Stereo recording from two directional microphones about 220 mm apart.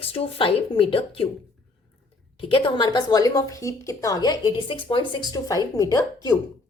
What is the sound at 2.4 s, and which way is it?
A woman's voice, 25° left (ahead or behind).